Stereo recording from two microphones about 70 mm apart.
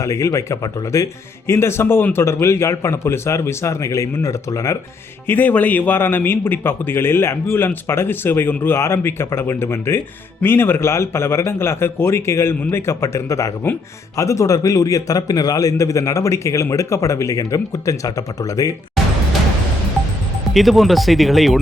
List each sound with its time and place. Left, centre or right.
0.0 s a man's voice: left
1.5 s a man's voice: left
5.3 s a man's voice: left
20.5 s speech: centre